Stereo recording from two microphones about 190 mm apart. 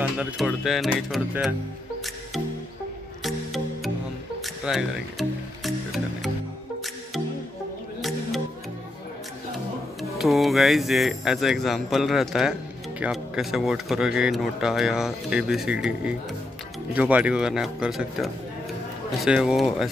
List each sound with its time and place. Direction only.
0.0 s speech: 5° right (ahead or behind)
3.3 s music: centre (ahead or behind)
10.1 s speech: centre (ahead or behind)